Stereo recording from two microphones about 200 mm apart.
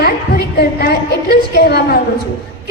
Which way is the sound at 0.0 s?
50° left (ahead or behind).